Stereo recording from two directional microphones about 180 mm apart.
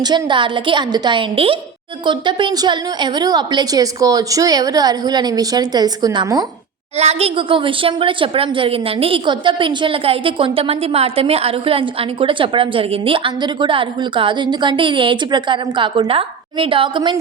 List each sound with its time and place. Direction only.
0.0 s a woman's voice: 25° right (ahead or behind)
6.9 s a woman's voice: 35° right (ahead or behind)